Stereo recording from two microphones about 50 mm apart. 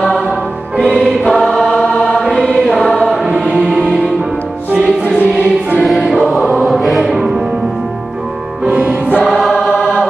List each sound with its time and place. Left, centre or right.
0.7 s music: centre
1.3 s choir: centre
3.4 s music: centre
5.9 s choir: centre
7.0 s music: centre
8.6 s music: right
9.2 s choir: centre
9.7 s choir: centre